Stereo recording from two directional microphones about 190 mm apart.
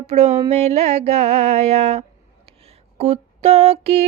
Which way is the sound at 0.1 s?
35° right (ahead or behind).